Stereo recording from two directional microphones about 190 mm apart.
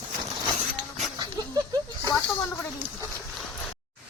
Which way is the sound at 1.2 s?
20° right (ahead or behind).